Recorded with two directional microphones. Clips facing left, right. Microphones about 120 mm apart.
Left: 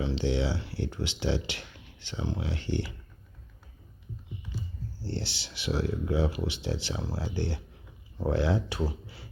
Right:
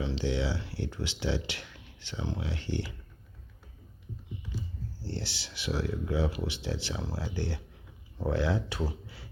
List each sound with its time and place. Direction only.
0.0 s speech: 25° left (ahead or behind)
5.1 s speech: 25° left (ahead or behind)